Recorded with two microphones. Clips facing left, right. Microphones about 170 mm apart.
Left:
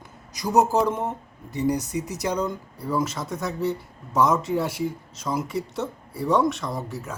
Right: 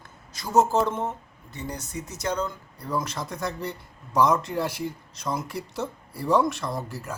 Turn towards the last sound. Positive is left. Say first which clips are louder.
# left 1 dB
turn(degrees=0)  # may be behind; listen again after turning